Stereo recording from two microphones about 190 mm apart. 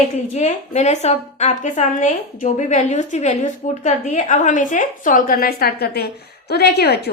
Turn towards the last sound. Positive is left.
turn(degrees=55)  # may be behind; listen again after turning